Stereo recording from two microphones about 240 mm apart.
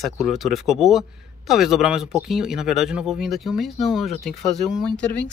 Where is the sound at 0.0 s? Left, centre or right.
Centre.